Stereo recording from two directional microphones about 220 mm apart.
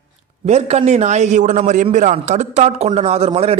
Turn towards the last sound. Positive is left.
turn(degrees=-25)  # may be behind; listen again after turning